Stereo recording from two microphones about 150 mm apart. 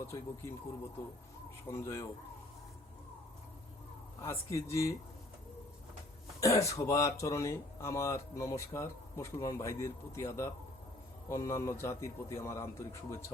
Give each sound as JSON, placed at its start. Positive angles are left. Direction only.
{"t": 0.0, "sound": "speech", "side_deg": 20}
{"t": 1.7, "sound": "speech", "side_deg": 20}
{"t": 4.2, "sound": "speech", "side_deg": 20}
{"t": 6.4, "sound": "speech", "side_deg": 20}